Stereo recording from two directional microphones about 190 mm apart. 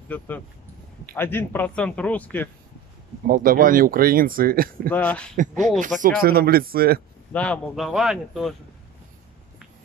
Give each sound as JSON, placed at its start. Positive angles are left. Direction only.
{"t": 0.1, "sound": "a man's voice", "side_deg": 10}
{"t": 3.3, "sound": "speech", "side_deg": -45}
{"t": 4.8, "sound": "a man's voice", "side_deg": 10}
{"t": 6.0, "sound": "speech", "side_deg": -50}
{"t": 7.3, "sound": "speech", "side_deg": 5}